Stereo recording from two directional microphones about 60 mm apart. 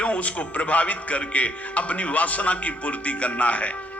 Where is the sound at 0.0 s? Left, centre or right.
Left.